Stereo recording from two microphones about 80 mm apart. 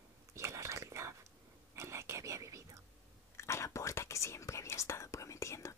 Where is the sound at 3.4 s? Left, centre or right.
Left.